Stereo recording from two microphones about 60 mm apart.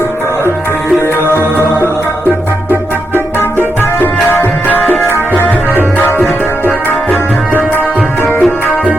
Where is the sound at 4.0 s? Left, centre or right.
Left.